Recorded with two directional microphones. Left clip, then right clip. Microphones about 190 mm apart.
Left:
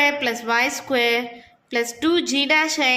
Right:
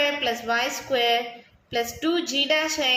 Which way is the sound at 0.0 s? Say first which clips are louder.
Left 4 dB; 45° left (ahead or behind).